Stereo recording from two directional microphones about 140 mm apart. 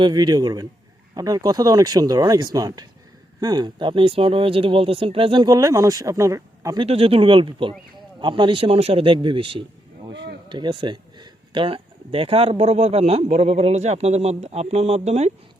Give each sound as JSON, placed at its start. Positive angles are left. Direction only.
{"t": 0.0, "sound": "speech", "side_deg": -30}
{"t": 6.7, "sound": "a man's voice", "side_deg": -45}